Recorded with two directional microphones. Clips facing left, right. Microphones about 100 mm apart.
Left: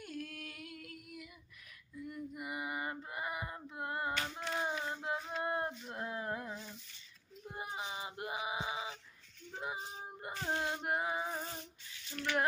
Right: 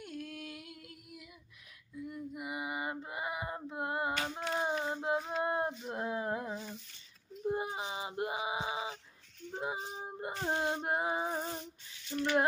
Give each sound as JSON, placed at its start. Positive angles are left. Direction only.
{"t": 0.0, "sound": "female singing", "side_deg": -20}
{"t": 4.6, "sound": "child singing", "side_deg": -20}
{"t": 5.4, "sound": "a sound", "side_deg": -20}
{"t": 7.4, "sound": "child singing", "side_deg": -25}